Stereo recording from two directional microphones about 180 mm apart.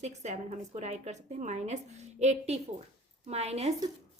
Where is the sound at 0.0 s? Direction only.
40° right (ahead or behind).